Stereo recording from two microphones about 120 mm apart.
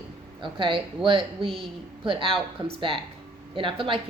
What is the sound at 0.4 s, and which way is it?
Speech, 45° right (ahead or behind).